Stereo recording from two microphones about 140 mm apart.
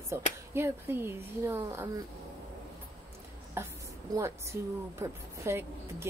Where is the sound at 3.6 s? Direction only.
15° right (ahead or behind).